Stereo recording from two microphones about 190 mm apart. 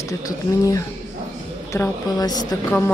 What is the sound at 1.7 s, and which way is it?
Speech, 15° left (ahead or behind).